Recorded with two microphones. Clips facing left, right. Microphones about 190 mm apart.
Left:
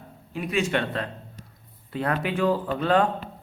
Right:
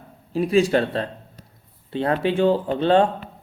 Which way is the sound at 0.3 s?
35° right (ahead or behind).